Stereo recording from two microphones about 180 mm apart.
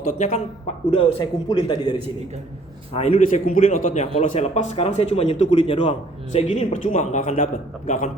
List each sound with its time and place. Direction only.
0.2 s a man's voice: 40° left (ahead or behind)
0.9 s a man's voice: 25° left (ahead or behind)
2.9 s a man's voice: 35° left (ahead or behind)